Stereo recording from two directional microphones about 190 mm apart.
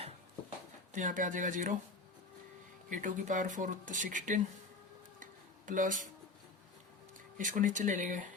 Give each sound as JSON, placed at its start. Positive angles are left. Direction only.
{"t": 0.9, "sound": "speech", "side_deg": -40}
{"t": 2.9, "sound": "speech", "side_deg": -45}
{"t": 5.2, "sound": "a sound", "side_deg": -45}
{"t": 7.3, "sound": "speech", "side_deg": -45}